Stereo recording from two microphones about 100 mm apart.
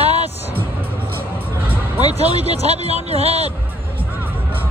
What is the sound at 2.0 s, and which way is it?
Speech, 90° right.